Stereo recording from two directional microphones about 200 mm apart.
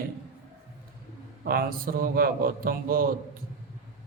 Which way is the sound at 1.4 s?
50° right (ahead or behind).